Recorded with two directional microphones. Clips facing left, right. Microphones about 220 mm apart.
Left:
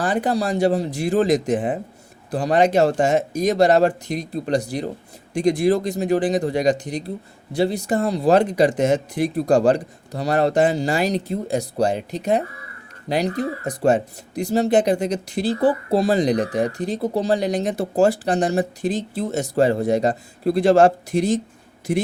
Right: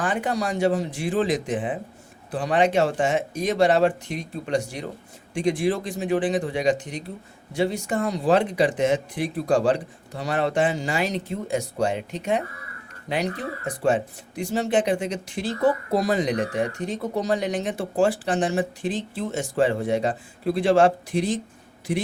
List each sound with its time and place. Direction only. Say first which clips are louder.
0.0 s speech: left 4 dB; 35° left (ahead or behind)